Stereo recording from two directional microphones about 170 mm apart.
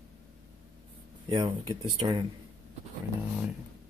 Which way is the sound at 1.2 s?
25° right (ahead or behind).